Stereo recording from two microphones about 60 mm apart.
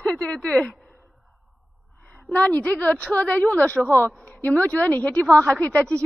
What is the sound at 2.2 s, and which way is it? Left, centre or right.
A woman's voice, left.